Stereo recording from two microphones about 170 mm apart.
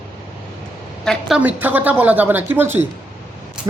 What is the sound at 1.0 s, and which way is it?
A woman's voice, centre (ahead or behind).